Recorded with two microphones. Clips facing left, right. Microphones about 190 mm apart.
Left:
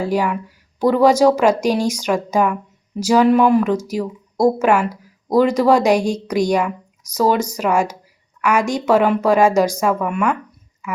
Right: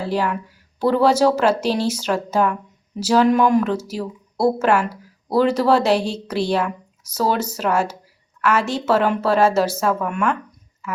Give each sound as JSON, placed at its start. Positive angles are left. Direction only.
{"t": 0.0, "sound": "a woman's voice", "side_deg": 10}